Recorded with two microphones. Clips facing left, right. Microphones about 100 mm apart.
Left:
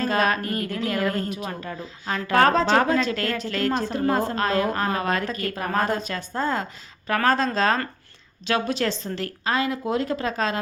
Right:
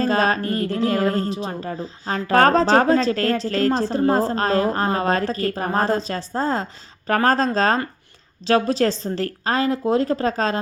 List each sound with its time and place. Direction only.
0.0 s speech: 35° right (ahead or behind)